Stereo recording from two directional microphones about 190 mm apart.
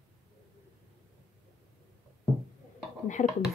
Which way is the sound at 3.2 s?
35° left (ahead or behind).